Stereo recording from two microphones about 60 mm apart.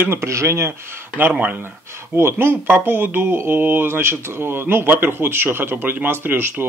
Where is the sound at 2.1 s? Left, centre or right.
Right.